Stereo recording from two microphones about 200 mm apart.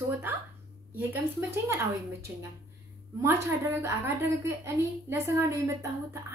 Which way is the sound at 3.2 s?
10° right (ahead or behind).